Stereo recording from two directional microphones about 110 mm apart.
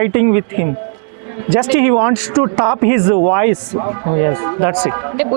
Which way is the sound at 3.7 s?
30° right (ahead or behind).